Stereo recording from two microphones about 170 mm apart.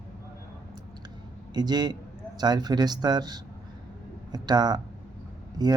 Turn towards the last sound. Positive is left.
turn(degrees=-25)  # may be behind; listen again after turning